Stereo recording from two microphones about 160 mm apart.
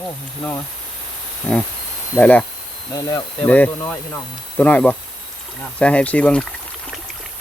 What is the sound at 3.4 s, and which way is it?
Speech, 10° left (ahead or behind).